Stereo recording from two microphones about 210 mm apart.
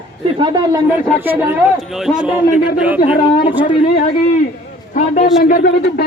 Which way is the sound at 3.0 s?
25° left (ahead or behind).